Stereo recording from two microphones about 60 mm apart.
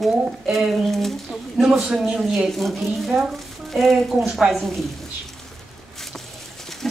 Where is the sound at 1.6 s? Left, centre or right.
Centre.